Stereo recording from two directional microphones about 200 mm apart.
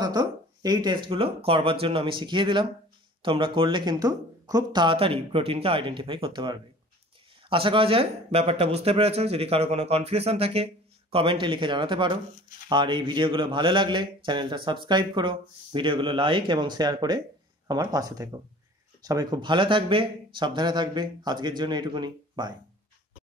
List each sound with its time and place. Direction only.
0.0 s speech: 20° right (ahead or behind)